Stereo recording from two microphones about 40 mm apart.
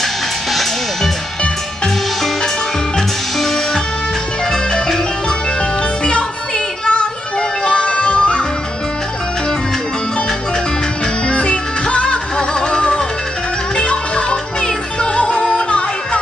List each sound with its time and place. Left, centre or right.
0.0 s music: centre
3.3 s music: centre
5.6 s music: left
11.2 s music: left